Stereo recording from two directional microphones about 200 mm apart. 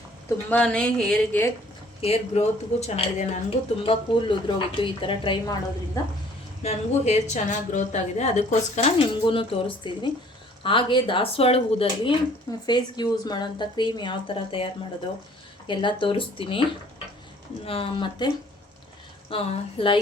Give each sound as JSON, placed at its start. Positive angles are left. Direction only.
{"t": 0.5, "sound": "a sound", "side_deg": 5}
{"t": 2.0, "sound": "a woman's voice", "side_deg": 30}
{"t": 4.4, "sound": "speech", "side_deg": 25}
{"t": 6.6, "sound": "a woman's voice", "side_deg": 35}
{"t": 17.7, "sound": "speech", "side_deg": 25}
{"t": 19.3, "sound": "speech", "side_deg": 25}